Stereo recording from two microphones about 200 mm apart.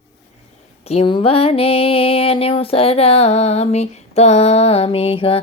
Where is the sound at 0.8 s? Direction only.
30° left (ahead or behind).